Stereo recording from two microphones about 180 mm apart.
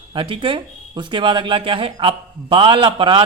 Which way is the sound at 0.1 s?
30° right (ahead or behind).